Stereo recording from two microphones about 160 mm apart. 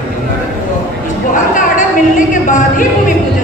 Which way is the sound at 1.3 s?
55° left (ahead or behind).